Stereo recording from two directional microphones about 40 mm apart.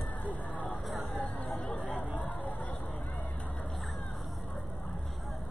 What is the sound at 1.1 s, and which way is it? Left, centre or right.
Hubbub, left.